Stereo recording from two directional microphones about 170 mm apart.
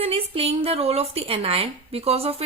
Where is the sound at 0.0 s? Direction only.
35° right (ahead or behind).